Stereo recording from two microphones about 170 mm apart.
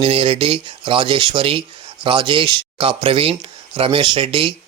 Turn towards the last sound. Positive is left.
turn(degrees=-30)  # may be behind; listen again after turning